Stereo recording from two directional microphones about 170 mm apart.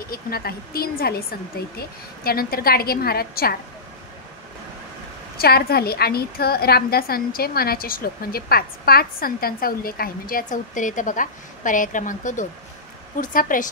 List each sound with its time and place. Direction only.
0.1 s a woman's voice: 65° left (ahead or behind)
5.4 s a woman's voice: 65° left (ahead or behind)